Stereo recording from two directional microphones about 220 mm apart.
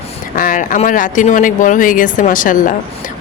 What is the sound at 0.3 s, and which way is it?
Speech, 40° left (ahead or behind).